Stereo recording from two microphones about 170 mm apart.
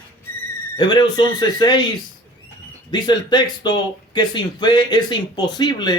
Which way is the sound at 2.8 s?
25° left (ahead or behind).